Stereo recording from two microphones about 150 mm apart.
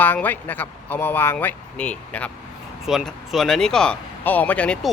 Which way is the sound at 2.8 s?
5° right (ahead or behind).